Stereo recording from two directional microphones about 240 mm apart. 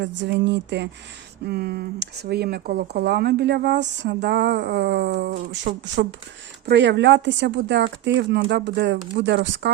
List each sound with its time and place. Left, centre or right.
0.0 s speech: right